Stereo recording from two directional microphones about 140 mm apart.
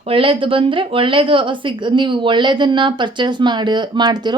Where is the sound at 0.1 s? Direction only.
40° right (ahead or behind).